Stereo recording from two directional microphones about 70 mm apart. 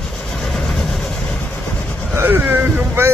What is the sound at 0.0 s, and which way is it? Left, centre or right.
Train, centre.